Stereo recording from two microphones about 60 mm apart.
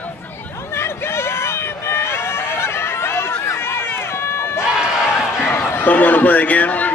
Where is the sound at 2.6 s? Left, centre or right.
Left.